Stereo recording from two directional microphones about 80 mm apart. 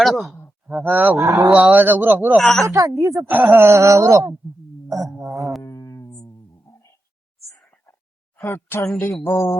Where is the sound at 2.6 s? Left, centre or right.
Right.